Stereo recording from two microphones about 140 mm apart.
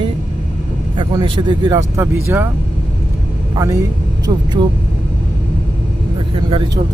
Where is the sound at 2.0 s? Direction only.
15° right (ahead or behind).